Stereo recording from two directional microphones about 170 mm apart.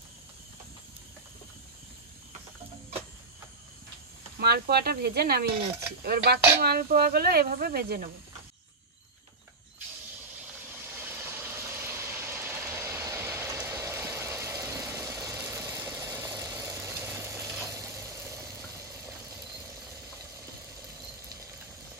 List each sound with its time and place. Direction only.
4.4 s speech: 70° right (ahead or behind)
11.0 s vehicle: 15° right (ahead or behind)